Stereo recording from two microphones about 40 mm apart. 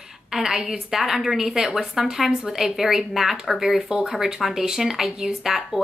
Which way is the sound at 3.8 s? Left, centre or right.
Centre.